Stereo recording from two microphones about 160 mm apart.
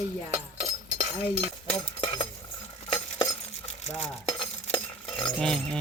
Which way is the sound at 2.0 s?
25° left (ahead or behind).